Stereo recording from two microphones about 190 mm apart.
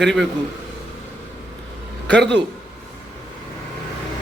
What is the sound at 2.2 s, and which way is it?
Speech, 65° right (ahead or behind).